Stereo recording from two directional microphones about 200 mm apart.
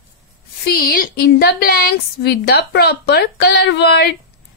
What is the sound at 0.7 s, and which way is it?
A woman's voice, 50° left (ahead or behind).